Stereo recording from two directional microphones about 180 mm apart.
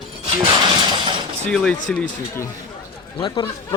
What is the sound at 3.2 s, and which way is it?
Speech, 30° left (ahead or behind).